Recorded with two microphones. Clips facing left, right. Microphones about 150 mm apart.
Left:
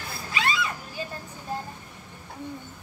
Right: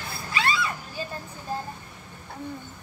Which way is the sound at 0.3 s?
20° left (ahead or behind).